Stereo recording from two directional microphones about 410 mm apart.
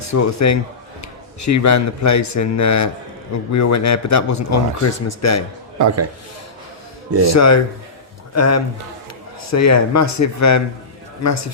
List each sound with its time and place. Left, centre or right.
0.1 s a man's voice: left
5.8 s a man's voice: right
7.3 s a man's voice: left